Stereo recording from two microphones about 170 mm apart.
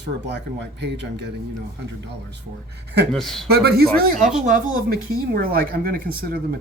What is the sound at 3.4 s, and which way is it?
Speech, 65° right (ahead or behind).